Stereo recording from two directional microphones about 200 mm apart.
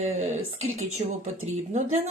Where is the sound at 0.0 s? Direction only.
35° right (ahead or behind).